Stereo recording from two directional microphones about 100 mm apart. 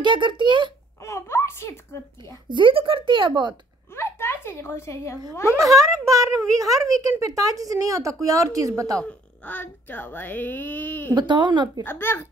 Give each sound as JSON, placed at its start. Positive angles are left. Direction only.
{"t": 0.0, "sound": "a child's voice", "side_deg": -55}
{"t": 1.0, "sound": "a sound", "side_deg": 30}
{"t": 2.5, "sound": "a woman's voice", "side_deg": -60}
{"t": 3.9, "sound": "a sound", "side_deg": 25}
{"t": 5.8, "sound": "a child's voice", "side_deg": -30}
{"t": 9.0, "sound": "a woman's voice", "side_deg": 15}
{"t": 11.1, "sound": "a child's voice", "side_deg": -50}
{"t": 11.8, "sound": "a woman's voice", "side_deg": 20}